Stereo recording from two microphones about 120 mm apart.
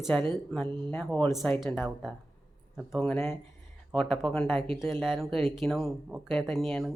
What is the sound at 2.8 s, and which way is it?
Speech, 5° right (ahead or behind).